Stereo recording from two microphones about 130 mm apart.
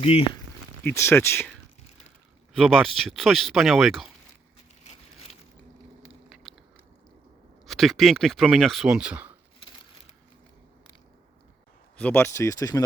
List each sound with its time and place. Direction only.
0.0 s speech: 45° left (ahead or behind)
0.9 s speech: 20° left (ahead or behind)
2.5 s speech: centre (ahead or behind)
6.1 s a sound: centre (ahead or behind)
7.7 s speech: centre (ahead or behind)
11.9 s speech: 15° left (ahead or behind)